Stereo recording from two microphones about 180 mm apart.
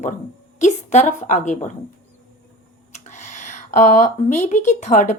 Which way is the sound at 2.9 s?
40° left (ahead or behind).